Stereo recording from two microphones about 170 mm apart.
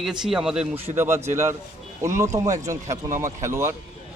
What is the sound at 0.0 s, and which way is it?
Speech, 5° right (ahead or behind).